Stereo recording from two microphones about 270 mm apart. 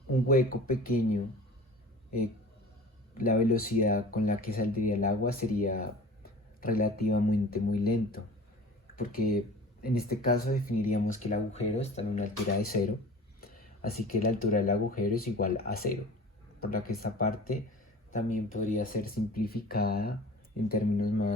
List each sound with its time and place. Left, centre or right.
0.1 s speech: left
3.2 s speech: left